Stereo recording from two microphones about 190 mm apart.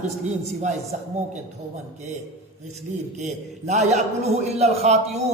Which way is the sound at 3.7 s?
35° right (ahead or behind).